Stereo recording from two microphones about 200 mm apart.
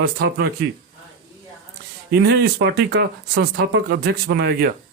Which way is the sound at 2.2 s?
55° right (ahead or behind).